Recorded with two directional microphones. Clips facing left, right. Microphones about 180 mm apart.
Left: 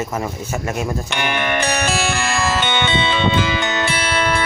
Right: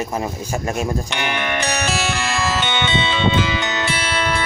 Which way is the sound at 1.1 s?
50° left (ahead or behind).